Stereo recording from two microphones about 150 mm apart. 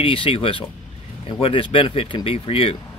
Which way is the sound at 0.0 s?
35° left (ahead or behind).